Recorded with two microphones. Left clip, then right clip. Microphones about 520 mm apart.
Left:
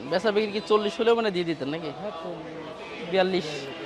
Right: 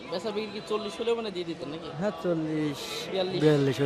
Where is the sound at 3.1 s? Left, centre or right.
Left.